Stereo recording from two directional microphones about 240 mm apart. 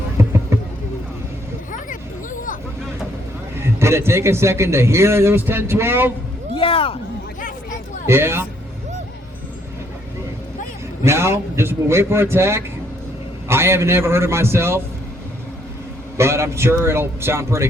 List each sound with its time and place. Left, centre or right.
0.2 s a sound: centre
1.7 s music: left
3.6 s a man's voice: centre
6.6 s speech: left
8.0 s a man's voice: centre
11.0 s a man's voice: centre
16.1 s a man's voice: centre